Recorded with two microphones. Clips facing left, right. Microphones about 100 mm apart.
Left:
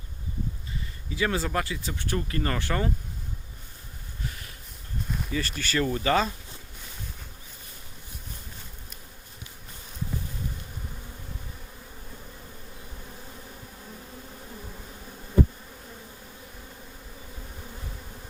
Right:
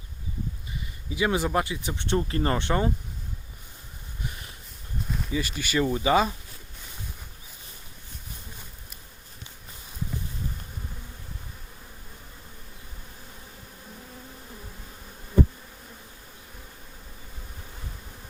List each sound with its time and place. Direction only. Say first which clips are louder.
1.1 s speech: right 3 dB; 15° right (ahead or behind)
4.2 s a sound: even; 20° right (ahead or behind)
5.3 s speech: right 2 dB; 15° right (ahead or behind)